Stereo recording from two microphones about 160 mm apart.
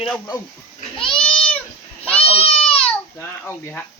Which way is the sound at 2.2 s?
35° left (ahead or behind).